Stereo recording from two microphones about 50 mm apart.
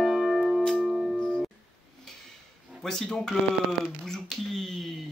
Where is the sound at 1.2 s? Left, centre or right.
Centre.